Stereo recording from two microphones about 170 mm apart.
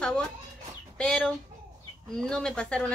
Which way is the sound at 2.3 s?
5° left (ahead or behind).